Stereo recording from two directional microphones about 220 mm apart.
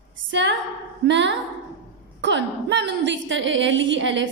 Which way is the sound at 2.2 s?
55° right (ahead or behind).